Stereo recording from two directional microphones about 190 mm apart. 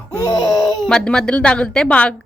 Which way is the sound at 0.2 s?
20° left (ahead or behind).